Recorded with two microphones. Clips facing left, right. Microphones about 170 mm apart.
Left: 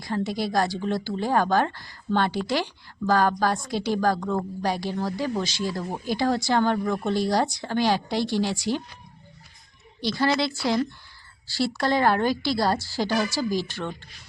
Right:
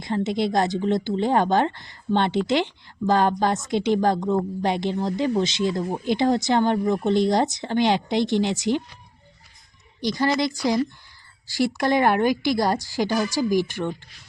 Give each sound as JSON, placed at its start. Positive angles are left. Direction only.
{"t": 0.0, "sound": "a woman's voice", "side_deg": -20}
{"t": 10.0, "sound": "a woman's voice", "side_deg": -15}